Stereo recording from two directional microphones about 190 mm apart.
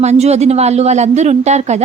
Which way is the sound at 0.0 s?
35° right (ahead or behind).